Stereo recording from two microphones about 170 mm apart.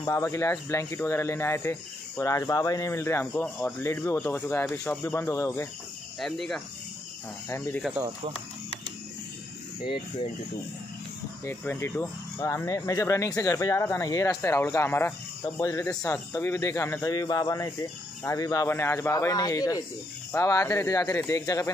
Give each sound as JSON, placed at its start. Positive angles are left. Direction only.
{"t": 0.0, "sound": "speech", "side_deg": 15}
{"t": 6.1, "sound": "speech", "side_deg": 0}
{"t": 7.4, "sound": "speech", "side_deg": 15}
{"t": 11.4, "sound": "speech", "side_deg": 15}